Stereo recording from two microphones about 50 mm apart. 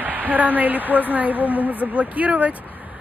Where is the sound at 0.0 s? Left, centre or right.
Right.